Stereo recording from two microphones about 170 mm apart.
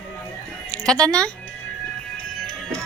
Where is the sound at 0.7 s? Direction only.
5° left (ahead or behind).